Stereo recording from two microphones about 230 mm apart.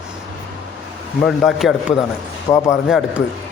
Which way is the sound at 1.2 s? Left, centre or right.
Centre.